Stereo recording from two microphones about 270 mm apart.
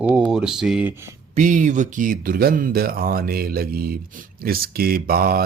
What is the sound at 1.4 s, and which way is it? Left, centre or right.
Speech, right.